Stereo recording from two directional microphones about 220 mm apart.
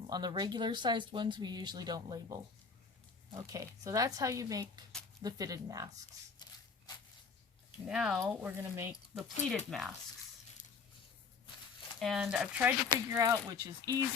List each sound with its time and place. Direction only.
0.1 s speech: 20° right (ahead or behind)
7.9 s speech: centre (ahead or behind)
9.6 s speech: centre (ahead or behind)
10.6 s a sound: 35° left (ahead or behind)
11.9 s speech: centre (ahead or behind); by 14.0 s 20° right (ahead or behind)